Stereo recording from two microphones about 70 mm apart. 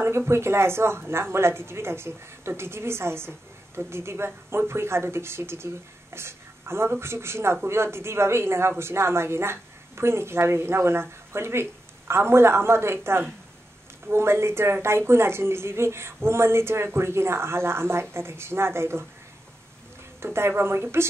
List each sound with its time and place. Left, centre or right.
0.3 s a woman's voice: right
20.3 s a woman's voice: right